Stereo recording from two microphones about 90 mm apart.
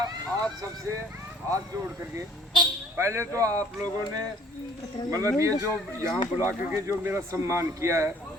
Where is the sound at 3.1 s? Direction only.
35° right (ahead or behind).